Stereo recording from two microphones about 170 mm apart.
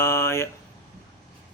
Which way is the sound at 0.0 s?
15° left (ahead or behind).